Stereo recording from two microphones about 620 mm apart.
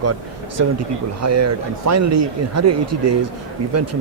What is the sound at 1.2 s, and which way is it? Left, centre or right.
Speech, right.